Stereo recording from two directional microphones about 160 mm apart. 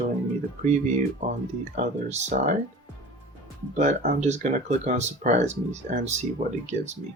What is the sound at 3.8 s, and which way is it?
Speech, 45° right (ahead or behind).